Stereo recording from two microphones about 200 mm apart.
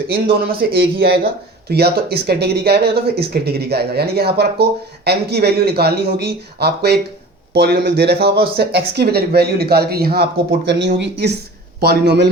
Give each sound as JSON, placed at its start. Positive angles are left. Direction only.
{"t": 0.6, "sound": "speech", "side_deg": -50}